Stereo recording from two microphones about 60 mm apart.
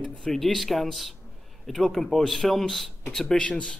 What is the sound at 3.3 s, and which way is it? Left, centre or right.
Speech, centre.